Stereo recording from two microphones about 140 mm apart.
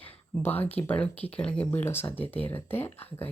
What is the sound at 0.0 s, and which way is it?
Speech, 15° left (ahead or behind).